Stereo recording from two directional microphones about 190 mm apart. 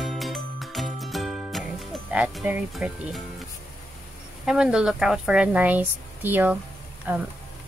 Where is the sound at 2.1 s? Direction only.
5° right (ahead or behind).